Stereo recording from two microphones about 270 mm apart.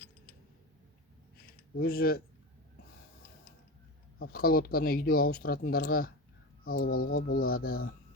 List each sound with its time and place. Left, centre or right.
1.8 s speech: left
4.2 s speech: left